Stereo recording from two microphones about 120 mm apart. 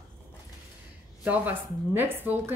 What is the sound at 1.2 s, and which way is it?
A woman's voice, 15° right (ahead or behind).